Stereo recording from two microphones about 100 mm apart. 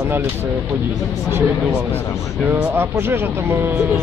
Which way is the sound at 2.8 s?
25° right (ahead or behind).